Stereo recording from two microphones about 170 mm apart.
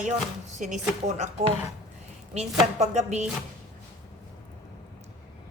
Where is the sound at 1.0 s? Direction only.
45° right (ahead or behind).